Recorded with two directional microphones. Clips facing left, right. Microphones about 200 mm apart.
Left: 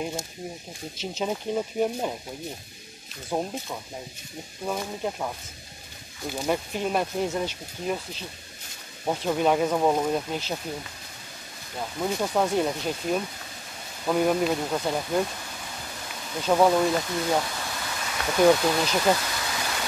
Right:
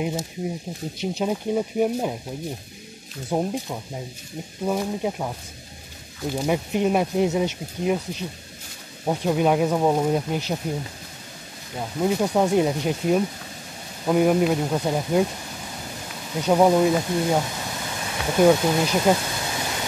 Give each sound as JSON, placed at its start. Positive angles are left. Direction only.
{"t": 0.0, "sound": "speech", "side_deg": -5}
{"t": 3.3, "sound": "speech", "side_deg": -15}
{"t": 6.3, "sound": "speech", "side_deg": -10}
{"t": 12.0, "sound": "speech", "side_deg": -10}
{"t": 16.3, "sound": "speech", "side_deg": -15}